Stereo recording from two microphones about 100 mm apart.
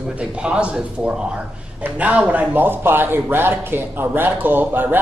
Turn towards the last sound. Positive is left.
turn(degrees=-20)  # may be behind; listen again after turning